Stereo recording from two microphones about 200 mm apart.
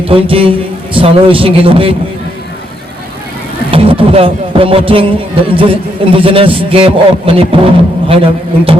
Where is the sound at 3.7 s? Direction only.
25° right (ahead or behind).